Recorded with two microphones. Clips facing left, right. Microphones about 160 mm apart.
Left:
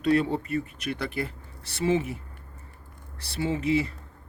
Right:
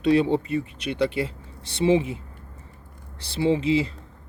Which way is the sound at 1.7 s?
25° right (ahead or behind).